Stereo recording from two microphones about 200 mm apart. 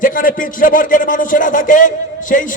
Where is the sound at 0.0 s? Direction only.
45° left (ahead or behind).